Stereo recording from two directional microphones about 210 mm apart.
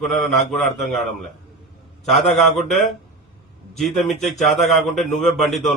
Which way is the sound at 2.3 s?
Centre (ahead or behind).